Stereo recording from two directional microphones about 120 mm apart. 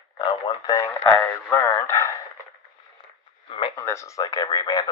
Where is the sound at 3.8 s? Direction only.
25° left (ahead or behind).